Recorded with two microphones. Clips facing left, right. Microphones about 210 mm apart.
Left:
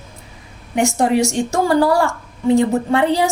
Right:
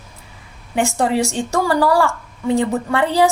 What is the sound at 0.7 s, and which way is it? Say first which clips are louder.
A woman's voice: left 2 dB; 15° left (ahead or behind).